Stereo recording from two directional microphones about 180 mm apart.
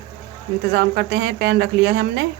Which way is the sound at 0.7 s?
65° right (ahead or behind).